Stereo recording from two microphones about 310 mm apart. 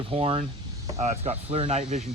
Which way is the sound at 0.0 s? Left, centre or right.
Centre.